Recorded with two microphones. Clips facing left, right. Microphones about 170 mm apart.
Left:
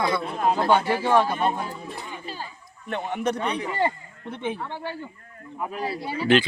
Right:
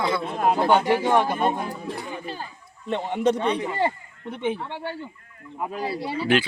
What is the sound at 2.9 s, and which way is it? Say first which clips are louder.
A man's voice: right 4 dB; 25° right (ahead or behind).